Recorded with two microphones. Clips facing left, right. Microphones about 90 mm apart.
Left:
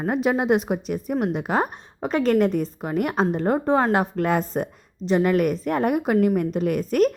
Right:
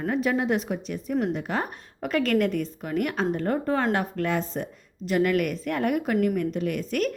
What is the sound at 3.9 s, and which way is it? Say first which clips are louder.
Speech: left 5 dB; 35° left (ahead or behind).